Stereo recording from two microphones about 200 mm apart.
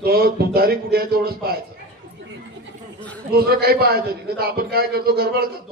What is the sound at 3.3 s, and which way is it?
A man's voice, 50° right (ahead or behind).